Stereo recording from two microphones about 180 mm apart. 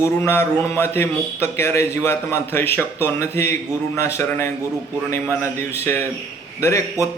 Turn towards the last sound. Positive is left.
turn(degrees=15)  # may be behind; listen again after turning